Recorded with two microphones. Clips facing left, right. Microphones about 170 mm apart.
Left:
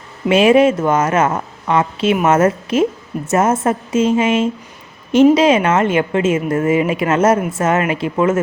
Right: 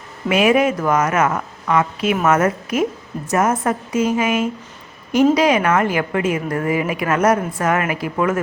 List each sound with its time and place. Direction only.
0.3 s a woman's voice: 25° left (ahead or behind)